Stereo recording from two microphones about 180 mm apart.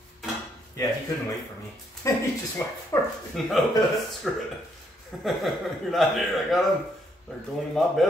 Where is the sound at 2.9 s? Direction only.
15° left (ahead or behind).